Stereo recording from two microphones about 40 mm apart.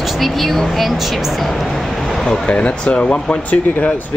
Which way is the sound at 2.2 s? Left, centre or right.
Left.